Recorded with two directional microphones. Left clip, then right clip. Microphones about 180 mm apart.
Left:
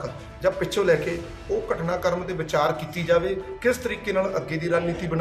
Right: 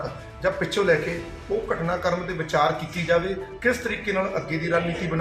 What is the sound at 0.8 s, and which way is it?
Speech, 20° left (ahead or behind).